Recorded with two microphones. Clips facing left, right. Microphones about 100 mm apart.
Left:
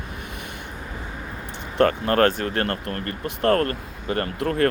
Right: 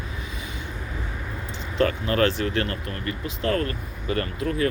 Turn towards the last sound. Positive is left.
turn(degrees=60)  # may be behind; listen again after turning